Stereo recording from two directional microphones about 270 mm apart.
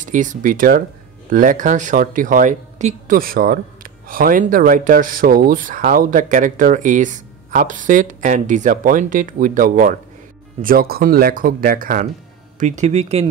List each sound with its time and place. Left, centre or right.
0.0 s speech: right